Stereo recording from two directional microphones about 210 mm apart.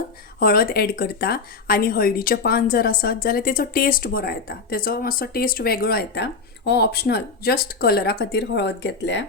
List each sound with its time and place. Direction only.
0.3 s a woman's voice: 45° left (ahead or behind)